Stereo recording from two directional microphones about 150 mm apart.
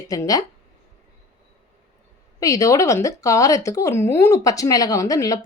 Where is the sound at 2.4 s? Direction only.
20° left (ahead or behind).